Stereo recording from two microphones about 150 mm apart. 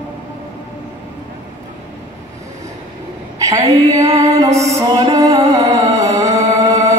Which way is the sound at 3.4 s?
20° right (ahead or behind).